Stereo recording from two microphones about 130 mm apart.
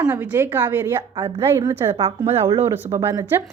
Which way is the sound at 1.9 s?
50° right (ahead or behind).